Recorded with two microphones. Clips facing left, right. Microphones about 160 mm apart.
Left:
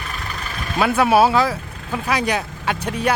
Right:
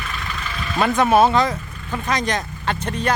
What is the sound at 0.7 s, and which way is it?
Speech, 10° left (ahead or behind).